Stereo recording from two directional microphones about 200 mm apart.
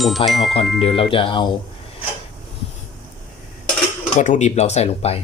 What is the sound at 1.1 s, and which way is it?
Speech, 25° left (ahead or behind).